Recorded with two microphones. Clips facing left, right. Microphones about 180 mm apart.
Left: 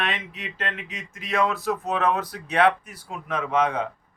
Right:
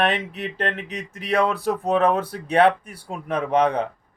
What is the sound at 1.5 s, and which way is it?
Speech, 30° right (ahead or behind).